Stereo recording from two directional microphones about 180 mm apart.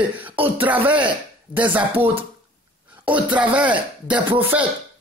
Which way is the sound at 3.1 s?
10° right (ahead or behind).